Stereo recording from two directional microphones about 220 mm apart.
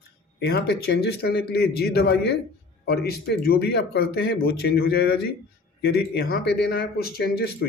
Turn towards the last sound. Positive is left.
turn(degrees=45)  # may be behind; listen again after turning